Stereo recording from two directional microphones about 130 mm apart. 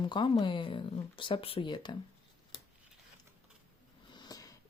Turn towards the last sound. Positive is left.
turn(degrees=30)  # may be behind; listen again after turning